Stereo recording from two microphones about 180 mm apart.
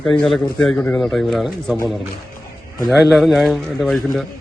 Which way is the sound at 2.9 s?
5° right (ahead or behind).